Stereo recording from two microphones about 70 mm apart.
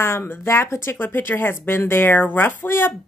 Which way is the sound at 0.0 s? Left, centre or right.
Left.